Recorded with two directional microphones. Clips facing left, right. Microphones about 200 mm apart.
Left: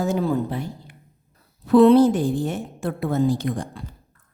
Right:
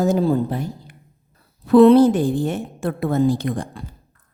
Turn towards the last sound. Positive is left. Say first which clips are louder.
# right 2 dB
turn(degrees=-55)  # may be behind; listen again after turning